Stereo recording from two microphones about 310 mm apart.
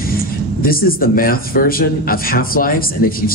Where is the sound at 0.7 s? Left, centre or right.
Left.